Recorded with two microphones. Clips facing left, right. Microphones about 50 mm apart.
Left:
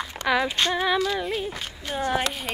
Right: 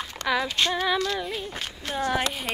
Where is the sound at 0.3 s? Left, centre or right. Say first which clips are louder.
Left 2 dB; centre.